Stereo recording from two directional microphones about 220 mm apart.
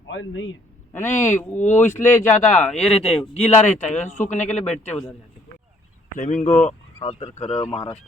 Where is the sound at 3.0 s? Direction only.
25° left (ahead or behind).